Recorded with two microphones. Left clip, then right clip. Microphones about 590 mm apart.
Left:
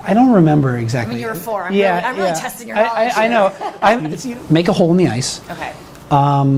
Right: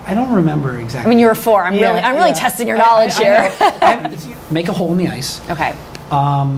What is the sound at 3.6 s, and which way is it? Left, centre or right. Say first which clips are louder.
Speech: right 13 dB; right.